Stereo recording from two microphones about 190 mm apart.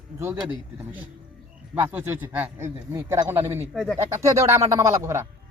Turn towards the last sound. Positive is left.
turn(degrees=-15)  # may be behind; listen again after turning